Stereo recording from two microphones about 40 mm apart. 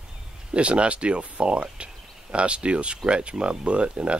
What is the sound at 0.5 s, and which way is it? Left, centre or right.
Speech, right.